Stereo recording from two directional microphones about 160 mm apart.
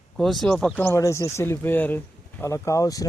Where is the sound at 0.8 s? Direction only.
15° left (ahead or behind).